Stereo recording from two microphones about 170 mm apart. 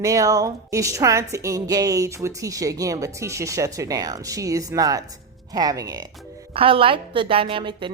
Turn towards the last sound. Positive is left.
turn(degrees=-30)  # may be behind; listen again after turning